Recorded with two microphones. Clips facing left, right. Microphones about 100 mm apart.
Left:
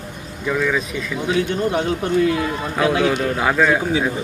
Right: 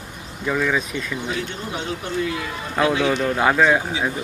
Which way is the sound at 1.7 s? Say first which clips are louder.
Left 5 dB; 50° left (ahead or behind).